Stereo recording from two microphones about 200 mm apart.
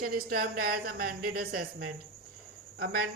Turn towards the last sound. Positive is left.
turn(degrees=-50)  # may be behind; listen again after turning